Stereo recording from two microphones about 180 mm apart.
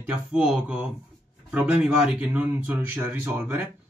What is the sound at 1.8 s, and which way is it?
Speech, 5° right (ahead or behind).